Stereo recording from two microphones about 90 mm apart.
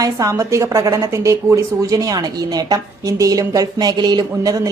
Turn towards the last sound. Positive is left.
turn(degrees=-45)  # may be behind; listen again after turning